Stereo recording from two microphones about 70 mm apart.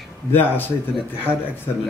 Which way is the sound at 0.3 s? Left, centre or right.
Left.